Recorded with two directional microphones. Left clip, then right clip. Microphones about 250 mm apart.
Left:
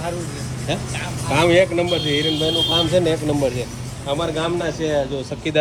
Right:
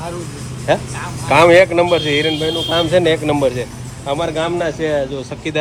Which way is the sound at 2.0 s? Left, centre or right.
Right.